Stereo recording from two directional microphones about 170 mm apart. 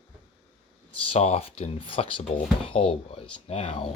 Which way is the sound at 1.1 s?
35° left (ahead or behind).